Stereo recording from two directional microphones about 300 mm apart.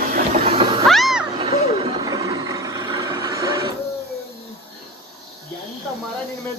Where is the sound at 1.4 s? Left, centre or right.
Centre.